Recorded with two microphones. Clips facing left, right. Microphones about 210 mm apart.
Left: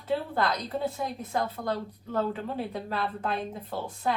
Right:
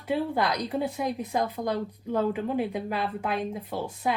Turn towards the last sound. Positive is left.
turn(degrees=-10)  # may be behind; listen again after turning